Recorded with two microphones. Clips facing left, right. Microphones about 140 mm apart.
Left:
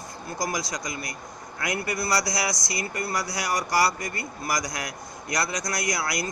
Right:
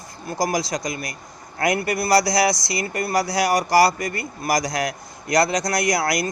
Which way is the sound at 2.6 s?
75° right (ahead or behind).